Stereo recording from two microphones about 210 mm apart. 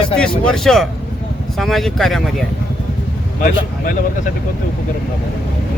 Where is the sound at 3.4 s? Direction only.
40° left (ahead or behind).